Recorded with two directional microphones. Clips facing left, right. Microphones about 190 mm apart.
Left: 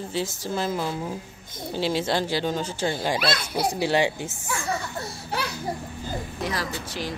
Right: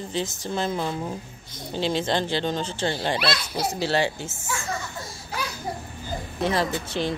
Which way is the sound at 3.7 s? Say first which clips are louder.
Left 1 dB; 15° left (ahead or behind).